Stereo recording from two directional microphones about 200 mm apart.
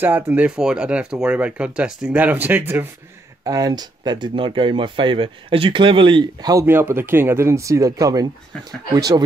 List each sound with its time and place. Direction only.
0.0 s speech: 10° right (ahead or behind)